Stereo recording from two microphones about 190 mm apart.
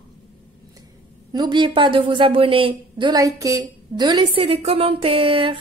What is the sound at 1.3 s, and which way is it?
Speech, 25° right (ahead or behind).